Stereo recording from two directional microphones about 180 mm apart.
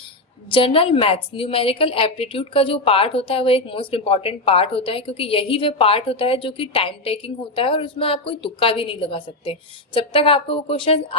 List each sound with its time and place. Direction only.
0.5 s a woman's voice: 30° left (ahead or behind)